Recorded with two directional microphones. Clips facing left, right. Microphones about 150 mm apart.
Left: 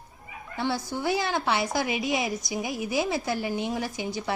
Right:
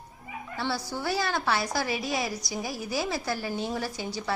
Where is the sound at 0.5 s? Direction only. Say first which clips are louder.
Left 3 dB; 20° left (ahead or behind).